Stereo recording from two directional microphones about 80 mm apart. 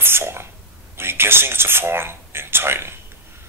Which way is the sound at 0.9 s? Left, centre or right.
Right.